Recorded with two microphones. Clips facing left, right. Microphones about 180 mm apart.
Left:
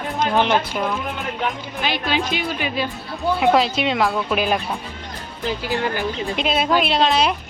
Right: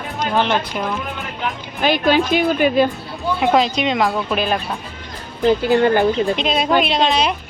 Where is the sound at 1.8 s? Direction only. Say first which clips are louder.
Right 7 dB; 45° right (ahead or behind).